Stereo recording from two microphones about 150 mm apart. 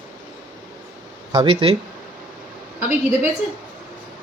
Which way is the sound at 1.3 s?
30° right (ahead or behind).